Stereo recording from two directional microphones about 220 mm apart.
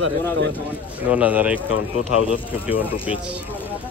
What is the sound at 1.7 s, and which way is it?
Speech, 75° left (ahead or behind).